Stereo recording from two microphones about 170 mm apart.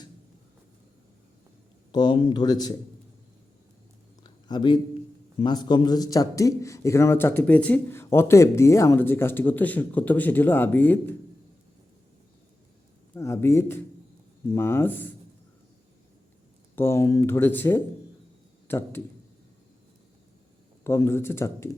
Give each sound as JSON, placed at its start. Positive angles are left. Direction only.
{"t": 1.9, "sound": "speech", "side_deg": 25}
{"t": 4.2, "sound": "a sound", "side_deg": 25}
{"t": 5.4, "sound": "a man's voice", "side_deg": 25}
{"t": 13.1, "sound": "a man's voice", "side_deg": 15}
{"t": 16.7, "sound": "a man's voice", "side_deg": 15}
{"t": 20.8, "sound": "a man's voice", "side_deg": 15}